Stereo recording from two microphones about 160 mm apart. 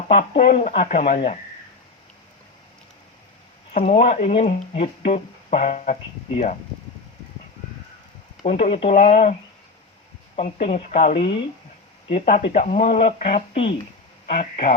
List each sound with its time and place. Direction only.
0.1 s speech: 45° left (ahead or behind)
1.0 s speech: 35° left (ahead or behind)
3.8 s speech: 45° left (ahead or behind)
8.7 s speech: 40° left (ahead or behind)
10.3 s speech: 40° left (ahead or behind)
13.1 s speech: 55° left (ahead or behind)
13.5 s speech: 40° left (ahead or behind)